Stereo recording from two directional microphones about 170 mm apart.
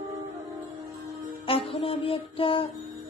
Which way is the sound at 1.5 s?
35° left (ahead or behind).